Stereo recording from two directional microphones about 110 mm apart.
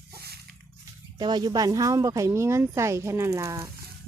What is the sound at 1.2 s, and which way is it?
Speech, 40° right (ahead or behind).